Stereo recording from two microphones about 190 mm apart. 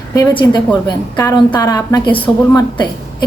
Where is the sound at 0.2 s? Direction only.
25° left (ahead or behind).